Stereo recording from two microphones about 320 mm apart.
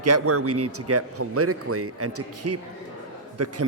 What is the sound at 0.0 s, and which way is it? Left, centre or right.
Speech, right.